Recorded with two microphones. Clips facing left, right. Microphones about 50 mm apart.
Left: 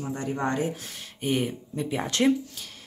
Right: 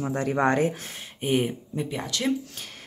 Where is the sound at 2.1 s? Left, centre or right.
Left.